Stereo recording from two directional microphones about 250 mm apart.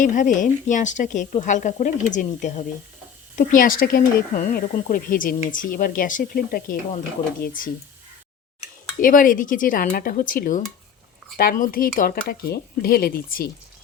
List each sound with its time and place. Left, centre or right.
0.0 s speech: left
9.0 s speech: left